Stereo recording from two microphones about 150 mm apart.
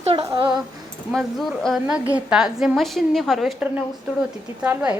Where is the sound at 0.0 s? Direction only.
40° right (ahead or behind).